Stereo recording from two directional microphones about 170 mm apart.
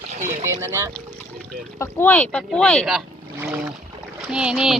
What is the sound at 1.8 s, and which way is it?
Speech, 10° left (ahead or behind).